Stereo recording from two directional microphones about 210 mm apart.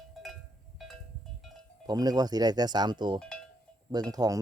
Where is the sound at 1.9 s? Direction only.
20° right (ahead or behind).